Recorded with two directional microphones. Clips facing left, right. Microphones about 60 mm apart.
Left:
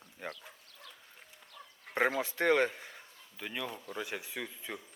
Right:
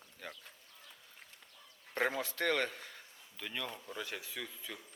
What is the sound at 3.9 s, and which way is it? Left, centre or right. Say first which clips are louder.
Speech: left 5 dB; centre.